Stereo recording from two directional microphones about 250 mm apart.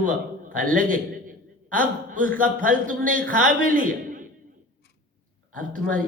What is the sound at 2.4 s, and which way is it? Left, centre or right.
A man's voice, right.